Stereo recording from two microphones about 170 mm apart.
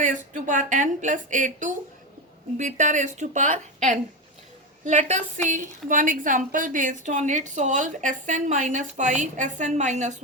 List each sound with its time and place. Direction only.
0.0 s a woman's voice: 50° right (ahead or behind)